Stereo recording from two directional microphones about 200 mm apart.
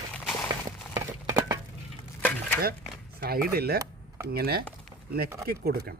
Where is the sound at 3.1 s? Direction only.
50° right (ahead or behind).